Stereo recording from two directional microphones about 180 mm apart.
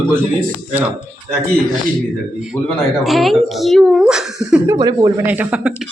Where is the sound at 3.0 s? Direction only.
Centre (ahead or behind).